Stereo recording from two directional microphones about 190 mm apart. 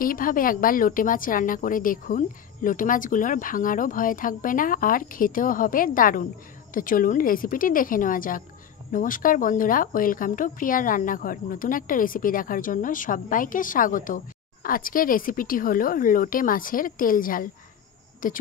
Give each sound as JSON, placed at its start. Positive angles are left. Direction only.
{"t": 0.0, "sound": "speech", "side_deg": 45}